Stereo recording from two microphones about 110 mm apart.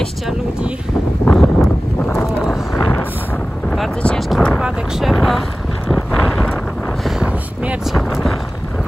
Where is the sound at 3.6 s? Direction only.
5° left (ahead or behind).